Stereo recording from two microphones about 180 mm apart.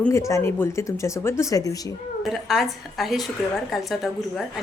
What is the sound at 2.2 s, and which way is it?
A woman's voice, centre (ahead or behind).